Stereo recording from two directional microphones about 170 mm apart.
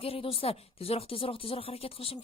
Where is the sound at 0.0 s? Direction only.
35° left (ahead or behind).